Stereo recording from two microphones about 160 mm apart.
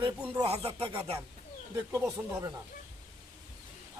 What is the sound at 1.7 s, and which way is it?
Speech, 20° right (ahead or behind).